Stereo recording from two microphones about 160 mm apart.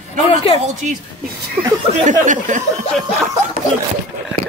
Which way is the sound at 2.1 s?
50° right (ahead or behind).